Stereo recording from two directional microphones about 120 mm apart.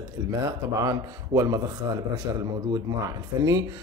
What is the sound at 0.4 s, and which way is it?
Speech, 30° right (ahead or behind).